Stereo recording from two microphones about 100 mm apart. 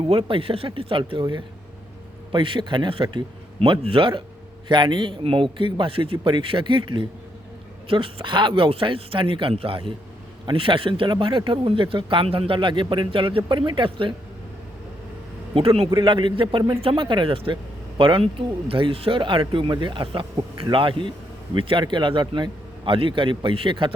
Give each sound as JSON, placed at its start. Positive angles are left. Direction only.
{"t": 0.1, "sound": "a man's voice", "side_deg": -60}
{"t": 15.5, "sound": "speech", "side_deg": -70}
{"t": 16.0, "sound": "a man's voice", "side_deg": -55}